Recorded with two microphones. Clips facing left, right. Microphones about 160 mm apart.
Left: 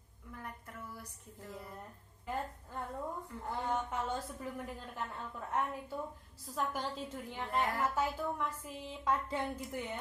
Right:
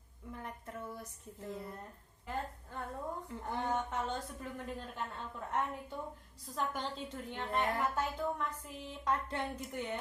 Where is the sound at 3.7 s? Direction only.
5° left (ahead or behind).